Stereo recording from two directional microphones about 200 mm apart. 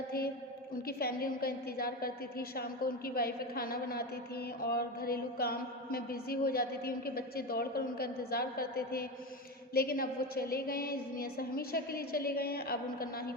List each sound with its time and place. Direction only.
0.9 s a woman's voice: 50° left (ahead or behind)